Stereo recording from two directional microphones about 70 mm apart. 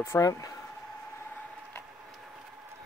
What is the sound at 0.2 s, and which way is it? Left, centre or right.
Speech, left.